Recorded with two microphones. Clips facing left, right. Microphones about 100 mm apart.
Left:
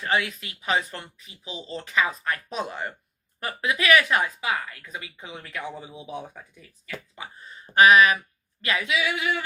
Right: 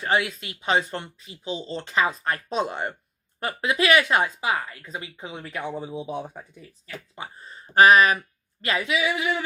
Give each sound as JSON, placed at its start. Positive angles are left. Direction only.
{"t": 0.0, "sound": "speech", "side_deg": -25}